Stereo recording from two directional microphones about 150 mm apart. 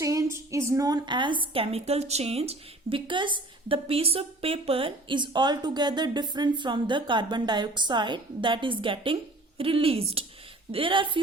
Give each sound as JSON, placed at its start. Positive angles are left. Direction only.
{"t": 0.0, "sound": "a woman's voice", "side_deg": -20}